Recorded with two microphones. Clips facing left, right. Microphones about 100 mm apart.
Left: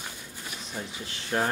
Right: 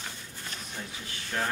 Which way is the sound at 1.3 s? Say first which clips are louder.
Left 5 dB; 35° left (ahead or behind).